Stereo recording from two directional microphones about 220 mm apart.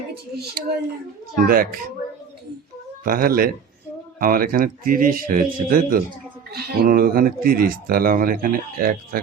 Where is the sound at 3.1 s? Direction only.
40° right (ahead or behind).